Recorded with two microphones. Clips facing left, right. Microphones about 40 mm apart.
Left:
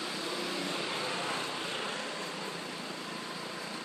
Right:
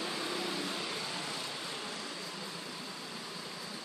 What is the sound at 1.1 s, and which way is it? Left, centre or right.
Vehicle, left.